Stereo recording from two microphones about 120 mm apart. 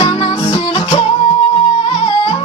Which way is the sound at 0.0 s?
50° left (ahead or behind).